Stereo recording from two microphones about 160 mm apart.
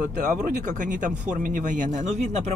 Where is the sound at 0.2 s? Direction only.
50° right (ahead or behind).